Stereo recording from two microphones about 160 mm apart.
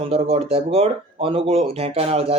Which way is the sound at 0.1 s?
40° right (ahead or behind).